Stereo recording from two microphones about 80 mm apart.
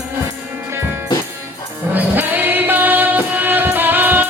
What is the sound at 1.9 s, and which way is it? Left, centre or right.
Music, right.